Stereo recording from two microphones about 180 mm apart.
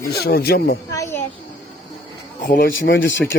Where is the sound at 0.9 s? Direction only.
15° left (ahead or behind).